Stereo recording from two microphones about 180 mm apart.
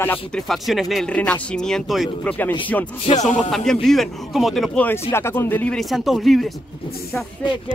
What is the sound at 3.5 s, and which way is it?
Speech, centre (ahead or behind).